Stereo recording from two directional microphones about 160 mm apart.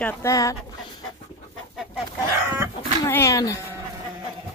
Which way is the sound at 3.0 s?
15° left (ahead or behind).